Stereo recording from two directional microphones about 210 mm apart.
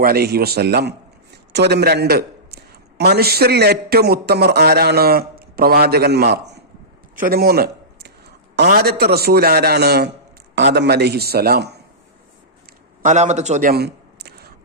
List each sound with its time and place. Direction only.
0.0 s a man's voice: 50° right (ahead or behind)
13.0 s a man's voice: 35° right (ahead or behind); by 14.5 s 50° right (ahead or behind)